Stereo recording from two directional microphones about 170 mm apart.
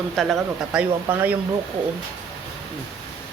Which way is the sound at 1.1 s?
10° right (ahead or behind).